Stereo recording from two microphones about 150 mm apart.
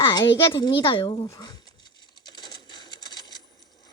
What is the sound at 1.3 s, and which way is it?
Zipper, 30° left (ahead or behind).